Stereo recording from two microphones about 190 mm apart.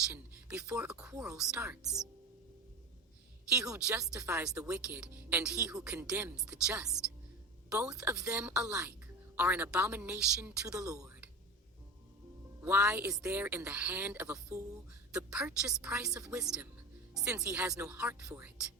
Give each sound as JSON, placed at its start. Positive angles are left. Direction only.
{"t": 0.1, "sound": "speech", "side_deg": -5}
{"t": 3.8, "sound": "speech", "side_deg": -5}
{"t": 10.7, "sound": "speech", "side_deg": -20}
{"t": 12.6, "sound": "speech", "side_deg": -10}